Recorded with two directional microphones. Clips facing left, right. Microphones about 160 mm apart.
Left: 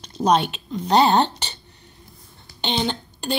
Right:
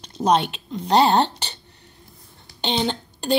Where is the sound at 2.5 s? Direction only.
35° right (ahead or behind).